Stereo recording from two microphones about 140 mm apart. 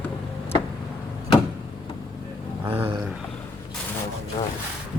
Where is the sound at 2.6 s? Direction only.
15° right (ahead or behind).